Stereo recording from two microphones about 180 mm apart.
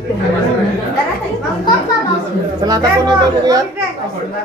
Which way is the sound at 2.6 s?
20° right (ahead or behind).